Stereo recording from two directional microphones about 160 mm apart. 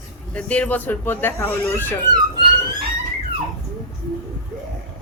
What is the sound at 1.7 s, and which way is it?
Speech, 25° right (ahead or behind).